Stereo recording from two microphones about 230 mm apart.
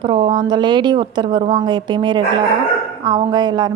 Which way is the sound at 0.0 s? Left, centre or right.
Right.